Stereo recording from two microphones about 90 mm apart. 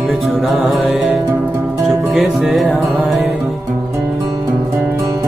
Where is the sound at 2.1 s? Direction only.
Centre (ahead or behind).